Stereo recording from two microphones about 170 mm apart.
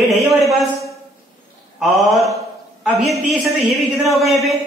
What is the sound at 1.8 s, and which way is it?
Speech, centre (ahead or behind).